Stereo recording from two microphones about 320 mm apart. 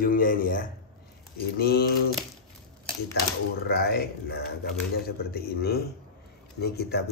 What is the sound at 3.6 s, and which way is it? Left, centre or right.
A man's voice, left.